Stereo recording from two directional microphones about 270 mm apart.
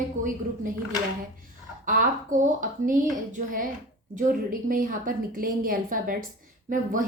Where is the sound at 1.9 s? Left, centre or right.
Right.